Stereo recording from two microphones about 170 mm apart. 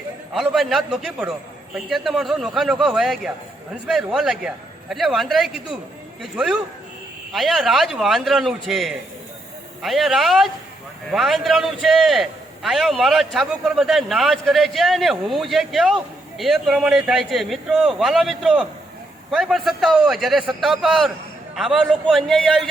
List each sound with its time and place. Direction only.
0.3 s a man's voice: centre (ahead or behind)